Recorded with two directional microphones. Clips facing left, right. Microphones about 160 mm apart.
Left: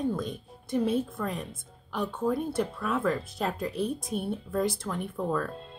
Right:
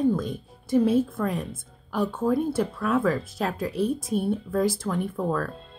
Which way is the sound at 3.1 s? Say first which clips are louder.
Right 3 dB; 5° right (ahead or behind).